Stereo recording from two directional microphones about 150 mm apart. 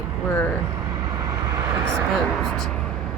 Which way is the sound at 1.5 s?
20° right (ahead or behind).